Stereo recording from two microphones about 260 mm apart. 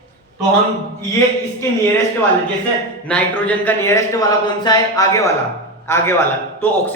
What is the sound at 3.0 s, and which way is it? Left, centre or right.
A man's voice, centre.